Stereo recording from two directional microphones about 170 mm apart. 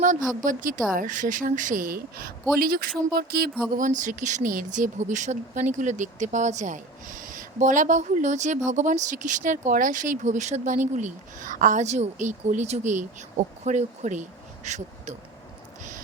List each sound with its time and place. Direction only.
0.4 s speech: 50° right (ahead or behind)
3.7 s speech: 50° right (ahead or behind)